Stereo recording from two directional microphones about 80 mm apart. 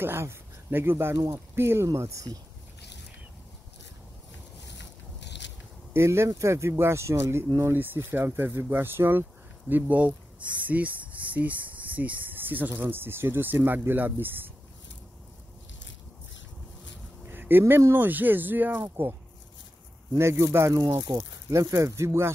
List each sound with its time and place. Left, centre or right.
0.0 s speech: right
5.9 s speech: right
7.7 s speech: right
17.3 s speech: right
20.2 s speech: right
21.1 s speech: right